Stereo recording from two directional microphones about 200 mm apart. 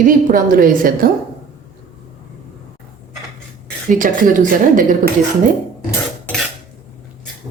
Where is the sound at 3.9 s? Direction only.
40° right (ahead or behind).